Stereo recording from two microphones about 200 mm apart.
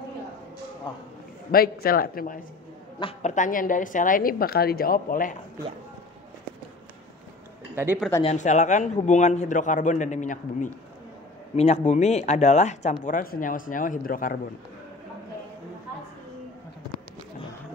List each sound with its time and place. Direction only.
0.9 s a man's voice: 25° left (ahead or behind)
1.5 s a woman's voice: 50° left (ahead or behind)
3.0 s a woman's voice: 30° left (ahead or behind)
7.7 s speech: 10° right (ahead or behind)
8.2 s a man's voice: 35° left (ahead or behind)